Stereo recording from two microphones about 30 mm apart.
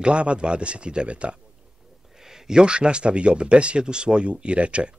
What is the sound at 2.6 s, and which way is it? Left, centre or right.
Speech, right.